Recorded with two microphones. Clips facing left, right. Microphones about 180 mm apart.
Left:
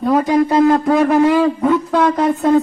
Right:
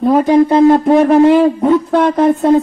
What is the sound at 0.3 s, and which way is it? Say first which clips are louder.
A woman's voice: right 5 dB; 30° right (ahead or behind).